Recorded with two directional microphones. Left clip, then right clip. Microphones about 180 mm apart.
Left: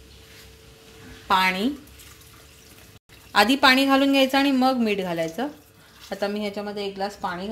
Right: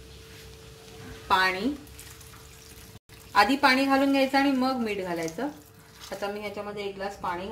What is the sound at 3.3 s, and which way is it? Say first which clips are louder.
Speech: left 4 dB; 50° left (ahead or behind).